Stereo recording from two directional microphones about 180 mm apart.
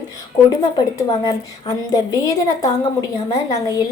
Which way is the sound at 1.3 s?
20° left (ahead or behind).